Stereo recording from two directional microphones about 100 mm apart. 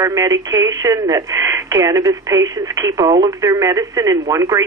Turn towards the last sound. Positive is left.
turn(degrees=-35)  # may be behind; listen again after turning